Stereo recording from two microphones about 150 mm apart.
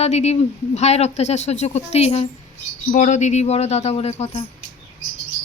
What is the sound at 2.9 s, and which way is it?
Speech, 55° left (ahead or behind).